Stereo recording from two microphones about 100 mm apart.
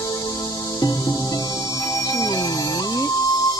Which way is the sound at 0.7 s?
40° left (ahead or behind).